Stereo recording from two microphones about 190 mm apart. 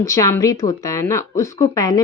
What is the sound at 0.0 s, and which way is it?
A woman's voice, 15° left (ahead or behind).